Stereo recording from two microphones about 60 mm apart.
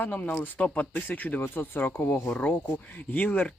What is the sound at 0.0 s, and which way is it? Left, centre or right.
Speech, left.